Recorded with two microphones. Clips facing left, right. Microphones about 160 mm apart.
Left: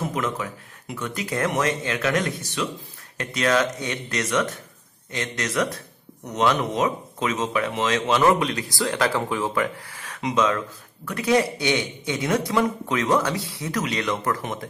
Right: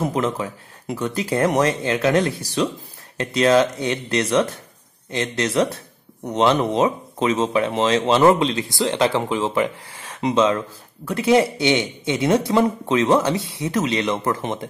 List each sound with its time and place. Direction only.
0.0 s speech: 30° right (ahead or behind)